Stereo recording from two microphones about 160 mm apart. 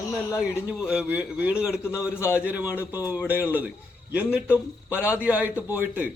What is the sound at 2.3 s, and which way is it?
Speech, 10° right (ahead or behind).